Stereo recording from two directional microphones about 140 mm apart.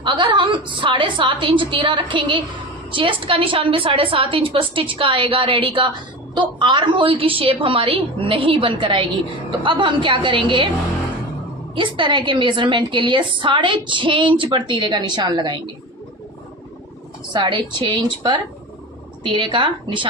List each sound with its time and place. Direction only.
0.0 s a woman's voice: 35° right (ahead or behind)
11.7 s a woman's voice: 35° right (ahead or behind)
17.3 s a woman's voice: 35° right (ahead or behind)